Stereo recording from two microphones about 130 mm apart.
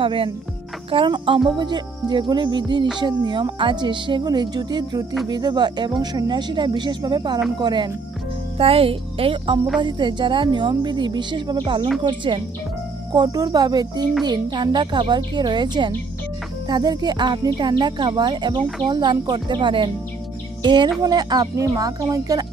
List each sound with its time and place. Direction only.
0.0 s speech: 45° right (ahead or behind)
8.5 s speech: 50° right (ahead or behind); by 22.5 s 30° right (ahead or behind)